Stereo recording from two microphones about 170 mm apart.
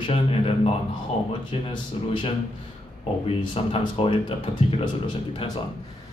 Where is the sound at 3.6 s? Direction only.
35° left (ahead or behind).